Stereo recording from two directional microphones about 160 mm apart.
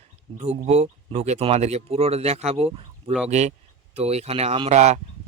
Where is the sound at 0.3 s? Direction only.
40° right (ahead or behind).